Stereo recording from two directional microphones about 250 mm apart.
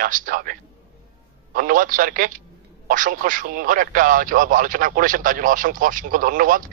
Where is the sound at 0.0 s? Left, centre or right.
Right.